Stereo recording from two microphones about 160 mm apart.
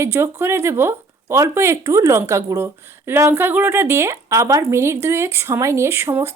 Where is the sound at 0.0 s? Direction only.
15° right (ahead or behind).